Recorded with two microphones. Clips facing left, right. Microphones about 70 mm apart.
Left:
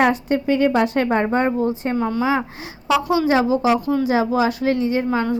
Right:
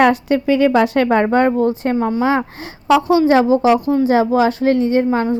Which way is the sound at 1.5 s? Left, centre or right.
Right.